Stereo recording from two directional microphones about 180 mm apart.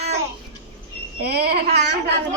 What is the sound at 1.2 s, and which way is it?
Speech, 65° right (ahead or behind).